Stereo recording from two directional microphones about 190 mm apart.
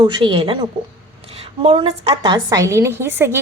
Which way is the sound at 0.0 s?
25° right (ahead or behind).